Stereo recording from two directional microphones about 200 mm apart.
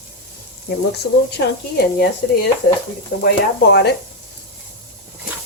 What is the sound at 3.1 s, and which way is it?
Speech, 40° left (ahead or behind).